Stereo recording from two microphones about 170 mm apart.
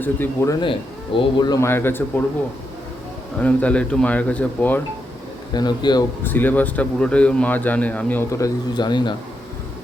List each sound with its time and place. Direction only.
0.0 s speech: 10° left (ahead or behind)
0.6 s speech: 30° left (ahead or behind); by 2.2 s 10° left (ahead or behind)
3.4 s speech: 10° left (ahead or behind)
5.5 s speech: 25° left (ahead or behind)
6.2 s speech: 10° left (ahead or behind)